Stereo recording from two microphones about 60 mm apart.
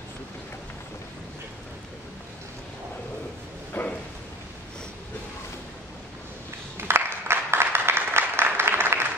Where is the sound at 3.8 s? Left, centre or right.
Left.